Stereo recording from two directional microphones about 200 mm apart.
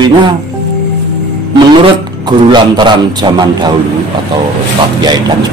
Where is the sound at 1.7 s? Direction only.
25° right (ahead or behind).